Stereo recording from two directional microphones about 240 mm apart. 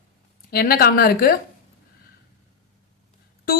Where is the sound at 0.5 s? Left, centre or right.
Left.